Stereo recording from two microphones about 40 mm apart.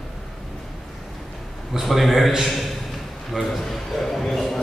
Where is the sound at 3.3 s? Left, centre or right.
Centre.